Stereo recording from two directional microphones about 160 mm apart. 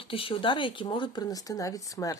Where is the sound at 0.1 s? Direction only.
35° left (ahead or behind).